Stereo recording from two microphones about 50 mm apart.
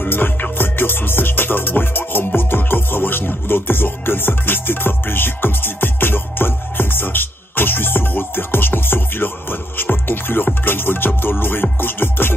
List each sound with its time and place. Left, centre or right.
0.1 s music: left